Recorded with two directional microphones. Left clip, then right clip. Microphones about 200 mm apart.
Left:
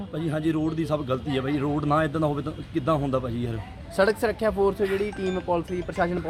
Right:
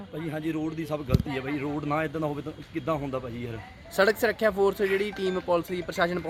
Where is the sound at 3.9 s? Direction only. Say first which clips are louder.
Left 1 dB; 40° right (ahead or behind).